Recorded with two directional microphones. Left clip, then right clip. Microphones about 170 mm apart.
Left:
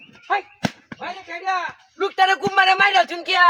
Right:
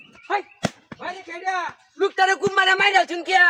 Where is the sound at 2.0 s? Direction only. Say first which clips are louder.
Left 1 dB; 15° right (ahead or behind).